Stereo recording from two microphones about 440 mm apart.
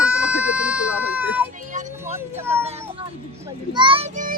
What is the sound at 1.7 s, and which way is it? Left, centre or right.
Music, centre.